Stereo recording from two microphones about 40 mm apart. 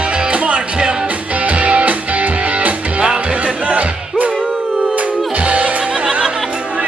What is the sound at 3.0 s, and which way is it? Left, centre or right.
Music, right.